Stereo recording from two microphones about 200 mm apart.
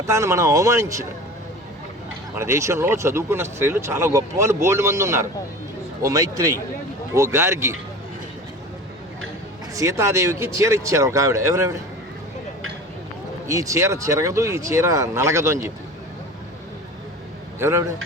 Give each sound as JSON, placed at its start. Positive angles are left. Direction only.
{"t": 0.0, "sound": "speech", "side_deg": -15}
{"t": 2.3, "sound": "speech", "side_deg": -15}
{"t": 9.7, "sound": "speech", "side_deg": -15}
{"t": 13.5, "sound": "speech", "side_deg": -15}
{"t": 17.6, "sound": "speech", "side_deg": -15}